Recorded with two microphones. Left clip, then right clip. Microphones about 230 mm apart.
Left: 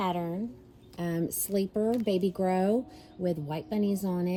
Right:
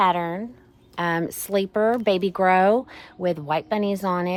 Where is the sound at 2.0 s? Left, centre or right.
Centre.